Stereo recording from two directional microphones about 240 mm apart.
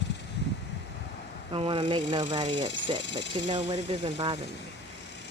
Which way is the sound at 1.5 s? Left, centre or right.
Right.